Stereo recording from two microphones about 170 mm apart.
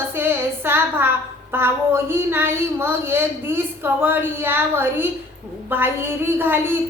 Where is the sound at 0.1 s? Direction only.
15° right (ahead or behind).